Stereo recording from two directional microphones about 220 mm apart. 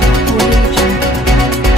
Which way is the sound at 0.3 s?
Centre (ahead or behind).